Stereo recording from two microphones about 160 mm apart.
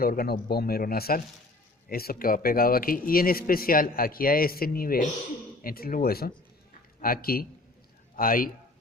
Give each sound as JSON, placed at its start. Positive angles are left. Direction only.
{"t": 0.0, "sound": "a man's voice", "side_deg": 65}